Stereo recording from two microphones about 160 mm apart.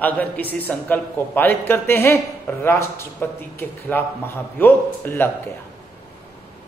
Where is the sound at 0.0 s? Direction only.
10° left (ahead or behind).